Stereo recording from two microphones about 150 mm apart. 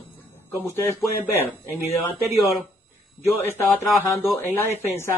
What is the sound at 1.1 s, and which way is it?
Speech, 15° right (ahead or behind).